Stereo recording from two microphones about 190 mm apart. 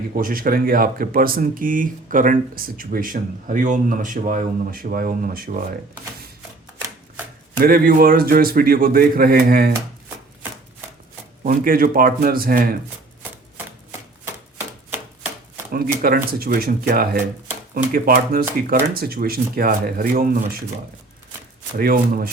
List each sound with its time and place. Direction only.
0.2 s speech: 50° right (ahead or behind)
7.6 s speech: 50° right (ahead or behind)
11.4 s speech: 45° right (ahead or behind)
15.7 s speech: 50° right (ahead or behind)
21.8 s speech: 50° right (ahead or behind)